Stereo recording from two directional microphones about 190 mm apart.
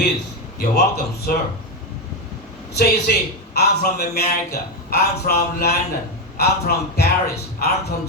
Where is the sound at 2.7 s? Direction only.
60° left (ahead or behind).